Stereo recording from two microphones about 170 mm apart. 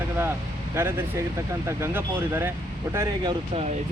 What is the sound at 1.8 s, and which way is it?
Speech, 15° right (ahead or behind).